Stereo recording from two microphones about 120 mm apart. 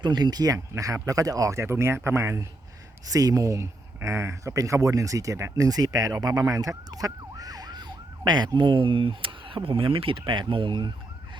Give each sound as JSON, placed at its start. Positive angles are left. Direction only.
{"t": 0.0, "sound": "speech", "side_deg": -35}
{"t": 6.4, "sound": "emergency vehicle", "side_deg": -25}